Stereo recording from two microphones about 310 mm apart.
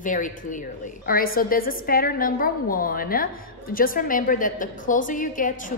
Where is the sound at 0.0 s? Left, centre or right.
Left.